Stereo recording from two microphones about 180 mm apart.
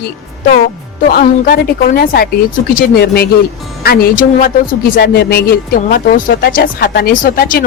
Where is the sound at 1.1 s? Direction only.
55° left (ahead or behind).